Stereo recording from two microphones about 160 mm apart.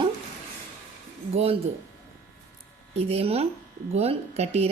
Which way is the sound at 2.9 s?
40° right (ahead or behind).